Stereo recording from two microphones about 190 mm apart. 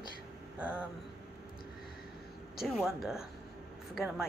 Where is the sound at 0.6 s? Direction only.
5° right (ahead or behind).